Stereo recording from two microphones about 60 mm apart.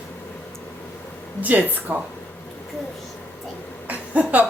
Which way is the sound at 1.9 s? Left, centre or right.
Right.